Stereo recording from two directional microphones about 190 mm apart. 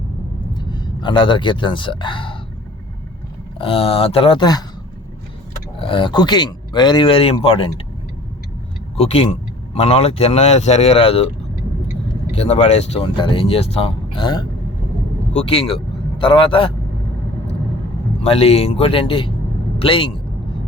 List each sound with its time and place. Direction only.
0.5 s speech: 25° left (ahead or behind)
3.6 s speech: 30° left (ahead or behind)
5.8 s speech: 25° left (ahead or behind)
9.0 s speech: 35° left (ahead or behind)
12.4 s speech: 30° left (ahead or behind)
18.2 s speech: 30° left (ahead or behind)